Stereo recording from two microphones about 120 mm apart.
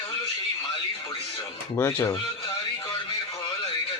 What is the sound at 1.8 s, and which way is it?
Speech, 20° left (ahead or behind).